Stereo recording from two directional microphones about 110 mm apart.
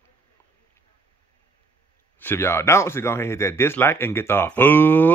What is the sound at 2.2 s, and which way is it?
Speech, 20° left (ahead or behind).